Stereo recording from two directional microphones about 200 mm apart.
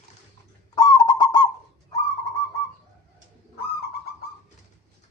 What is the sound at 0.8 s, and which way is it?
Honk, 20° left (ahead or behind).